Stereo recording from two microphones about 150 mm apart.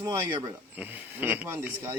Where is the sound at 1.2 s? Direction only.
15° right (ahead or behind).